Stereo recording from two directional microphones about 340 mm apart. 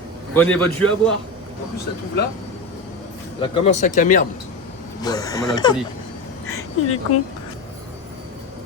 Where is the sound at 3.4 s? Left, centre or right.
Centre.